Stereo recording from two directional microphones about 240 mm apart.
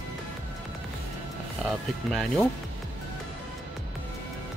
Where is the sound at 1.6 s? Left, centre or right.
Centre.